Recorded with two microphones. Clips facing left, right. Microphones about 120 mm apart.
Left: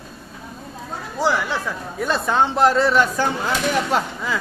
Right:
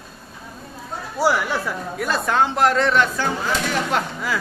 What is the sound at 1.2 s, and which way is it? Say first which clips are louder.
Speech: right 1 dB; 15° right (ahead or behind).